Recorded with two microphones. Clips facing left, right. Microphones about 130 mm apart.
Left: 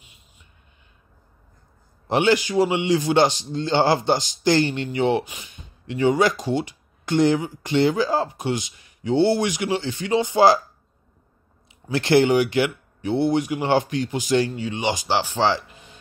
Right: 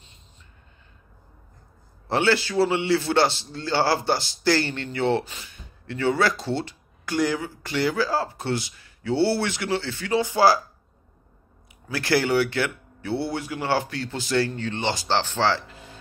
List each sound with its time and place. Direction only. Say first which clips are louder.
2.0 s a man's voice: left 3 dB; 15° left (ahead or behind)
11.9 s a man's voice: left 5 dB; 20° left (ahead or behind)